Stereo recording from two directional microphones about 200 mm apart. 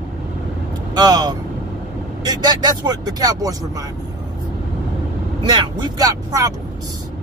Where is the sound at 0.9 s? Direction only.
20° right (ahead or behind).